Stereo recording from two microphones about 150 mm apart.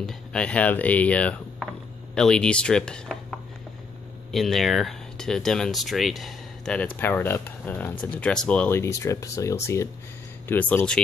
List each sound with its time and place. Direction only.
0.0 s speech: 5° left (ahead or behind)